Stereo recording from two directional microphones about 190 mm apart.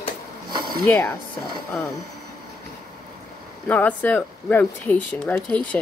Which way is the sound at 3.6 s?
10° left (ahead or behind).